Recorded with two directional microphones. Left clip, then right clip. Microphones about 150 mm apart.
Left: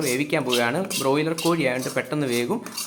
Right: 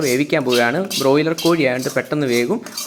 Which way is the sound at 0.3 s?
35° right (ahead or behind).